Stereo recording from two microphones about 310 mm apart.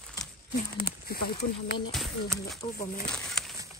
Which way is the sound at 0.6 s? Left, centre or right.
Left.